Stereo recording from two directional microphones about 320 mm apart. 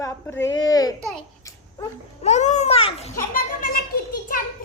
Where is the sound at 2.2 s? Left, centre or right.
Left.